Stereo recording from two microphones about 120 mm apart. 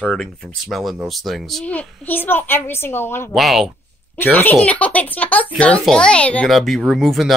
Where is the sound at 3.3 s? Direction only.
Centre (ahead or behind).